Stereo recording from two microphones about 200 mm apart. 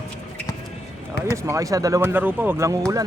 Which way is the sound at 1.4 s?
15° right (ahead or behind).